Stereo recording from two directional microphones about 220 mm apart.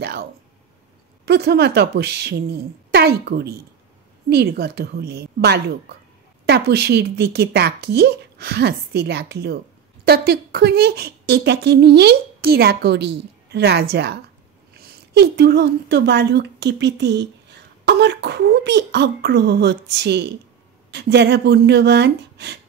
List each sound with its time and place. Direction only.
0.0 s a woman's voice: 45° right (ahead or behind)